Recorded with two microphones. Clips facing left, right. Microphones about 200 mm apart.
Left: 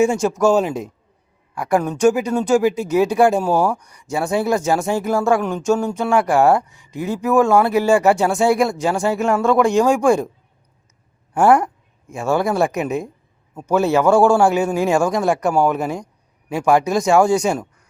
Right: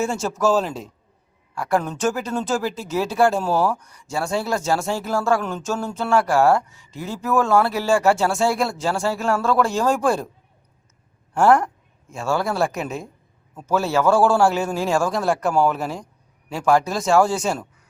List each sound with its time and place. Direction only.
0.1 s speech: 15° left (ahead or behind)
11.3 s speech: 15° left (ahead or behind)
12.6 s speech: centre (ahead or behind)
13.6 s speech: 15° left (ahead or behind)